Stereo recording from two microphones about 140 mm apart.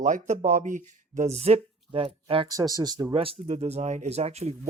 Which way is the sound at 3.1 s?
40° right (ahead or behind).